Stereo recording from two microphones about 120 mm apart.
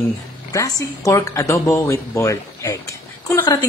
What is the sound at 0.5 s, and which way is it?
Speech, 30° left (ahead or behind).